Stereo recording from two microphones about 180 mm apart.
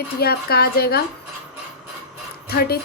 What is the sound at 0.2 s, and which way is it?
Speech, 60° left (ahead or behind).